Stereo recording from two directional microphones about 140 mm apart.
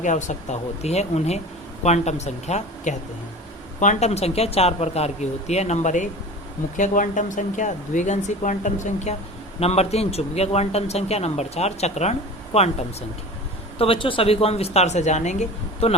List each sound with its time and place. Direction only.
0.0 s a man's voice: 60° left (ahead or behind)
9.6 s a man's voice: 50° left (ahead or behind)